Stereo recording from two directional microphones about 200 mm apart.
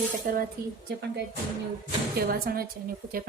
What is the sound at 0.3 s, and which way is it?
Speech, 45° right (ahead or behind).